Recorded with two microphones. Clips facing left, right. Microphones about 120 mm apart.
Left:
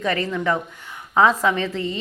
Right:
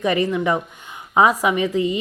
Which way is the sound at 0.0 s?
15° right (ahead or behind).